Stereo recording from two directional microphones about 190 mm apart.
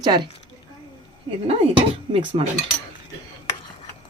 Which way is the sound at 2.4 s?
30° right (ahead or behind).